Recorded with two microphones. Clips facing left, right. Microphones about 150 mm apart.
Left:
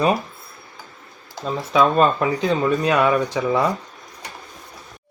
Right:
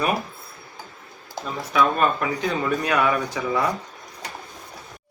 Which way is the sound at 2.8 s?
25° left (ahead or behind).